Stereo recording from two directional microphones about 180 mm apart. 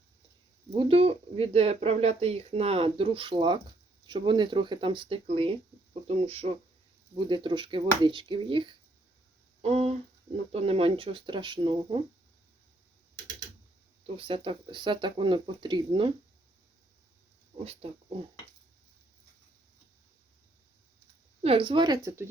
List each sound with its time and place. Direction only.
0.8 s speech: 30° right (ahead or behind)
14.2 s speech: 30° right (ahead or behind)
17.6 s speech: 35° right (ahead or behind)
21.4 s speech: 30° right (ahead or behind)